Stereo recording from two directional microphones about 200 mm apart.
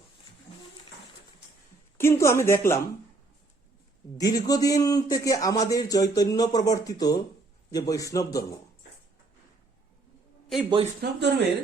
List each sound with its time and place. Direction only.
2.0 s a man's voice: 15° left (ahead or behind)
4.2 s a man's voice: 20° left (ahead or behind)
11.0 s speech: 55° right (ahead or behind)